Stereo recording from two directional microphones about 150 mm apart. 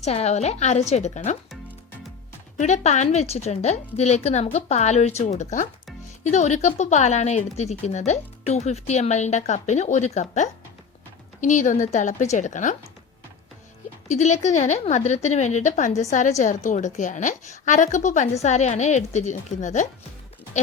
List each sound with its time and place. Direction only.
0.0 s speech: 45° left (ahead or behind)
2.6 s a woman's voice: 50° left (ahead or behind)
14.1 s a woman's voice: 50° left (ahead or behind)